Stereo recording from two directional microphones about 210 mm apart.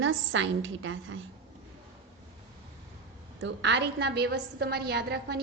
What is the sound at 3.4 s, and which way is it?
A woman's voice, 55° right (ahead or behind).